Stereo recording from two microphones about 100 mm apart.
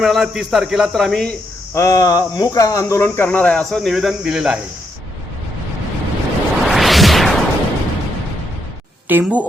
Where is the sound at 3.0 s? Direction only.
20° left (ahead or behind); by 4.5 s 5° right (ahead or behind).